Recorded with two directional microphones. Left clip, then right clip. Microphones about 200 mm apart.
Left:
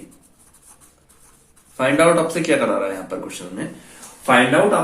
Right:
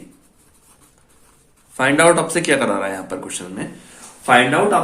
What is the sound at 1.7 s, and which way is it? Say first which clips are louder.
Speech: right 1 dB; 50° right (ahead or behind).